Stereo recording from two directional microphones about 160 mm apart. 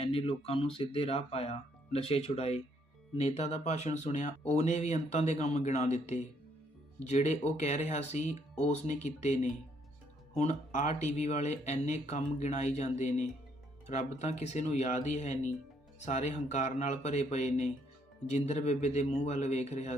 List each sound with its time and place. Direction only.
0.0 s speech: 35° left (ahead or behind)